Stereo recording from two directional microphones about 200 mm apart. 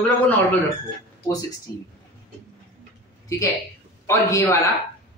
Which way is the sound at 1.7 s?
15° left (ahead or behind).